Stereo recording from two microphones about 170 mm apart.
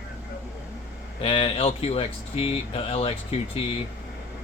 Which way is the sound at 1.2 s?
35° left (ahead or behind).